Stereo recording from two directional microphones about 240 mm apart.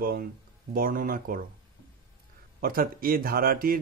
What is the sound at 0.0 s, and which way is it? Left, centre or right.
Speech, right.